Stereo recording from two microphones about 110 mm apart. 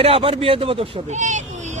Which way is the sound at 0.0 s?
55° right (ahead or behind).